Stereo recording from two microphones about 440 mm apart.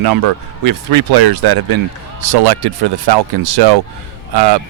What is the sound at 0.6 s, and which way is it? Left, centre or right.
Speech, right.